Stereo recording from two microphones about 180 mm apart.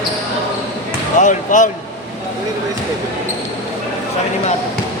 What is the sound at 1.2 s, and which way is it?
Speech, 45° left (ahead or behind).